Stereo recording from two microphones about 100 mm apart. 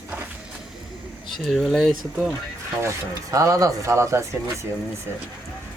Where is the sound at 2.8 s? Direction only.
30° right (ahead or behind).